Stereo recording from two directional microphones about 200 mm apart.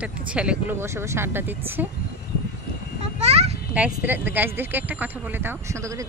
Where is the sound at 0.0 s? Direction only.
5° right (ahead or behind).